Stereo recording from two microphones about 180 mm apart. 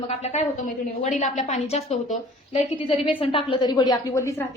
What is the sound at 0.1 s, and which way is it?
A woman's voice, 35° left (ahead or behind).